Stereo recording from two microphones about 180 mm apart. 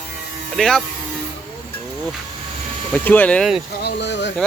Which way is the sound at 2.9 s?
10° left (ahead or behind).